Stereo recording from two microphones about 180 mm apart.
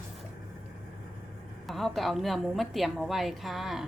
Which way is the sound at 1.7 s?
Centre (ahead or behind).